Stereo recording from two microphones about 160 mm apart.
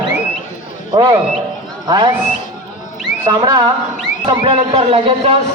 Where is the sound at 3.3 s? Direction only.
25° right (ahead or behind).